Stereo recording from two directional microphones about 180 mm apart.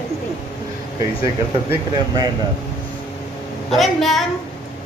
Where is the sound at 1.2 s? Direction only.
20° right (ahead or behind).